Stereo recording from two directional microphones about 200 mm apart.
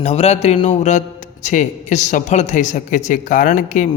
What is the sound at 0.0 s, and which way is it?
A man's voice, 30° left (ahead or behind).